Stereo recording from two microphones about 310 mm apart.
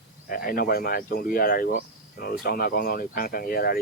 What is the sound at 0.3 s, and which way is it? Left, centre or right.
Speech, left.